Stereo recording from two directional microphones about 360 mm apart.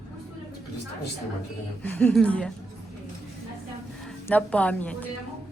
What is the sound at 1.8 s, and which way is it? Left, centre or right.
Speech, centre.